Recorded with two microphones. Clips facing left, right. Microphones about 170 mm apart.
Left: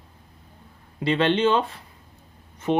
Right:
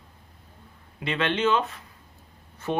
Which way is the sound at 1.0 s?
30° left (ahead or behind).